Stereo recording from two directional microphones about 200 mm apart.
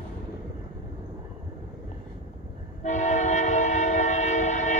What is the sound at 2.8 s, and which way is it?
Train, 35° left (ahead or behind).